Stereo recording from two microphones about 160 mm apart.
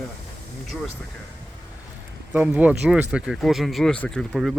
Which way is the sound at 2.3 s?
10° right (ahead or behind).